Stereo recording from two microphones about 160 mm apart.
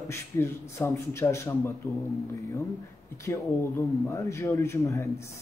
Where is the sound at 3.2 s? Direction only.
15° left (ahead or behind).